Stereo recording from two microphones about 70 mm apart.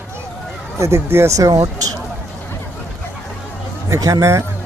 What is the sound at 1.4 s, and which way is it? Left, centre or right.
Speech, right.